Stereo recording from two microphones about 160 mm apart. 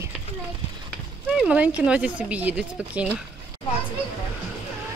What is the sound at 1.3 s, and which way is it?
Speech, 5° right (ahead or behind).